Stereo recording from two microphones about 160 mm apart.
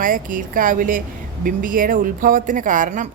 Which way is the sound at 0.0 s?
60° right (ahead or behind).